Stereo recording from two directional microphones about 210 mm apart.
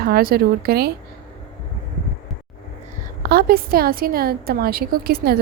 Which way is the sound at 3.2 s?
45° right (ahead or behind).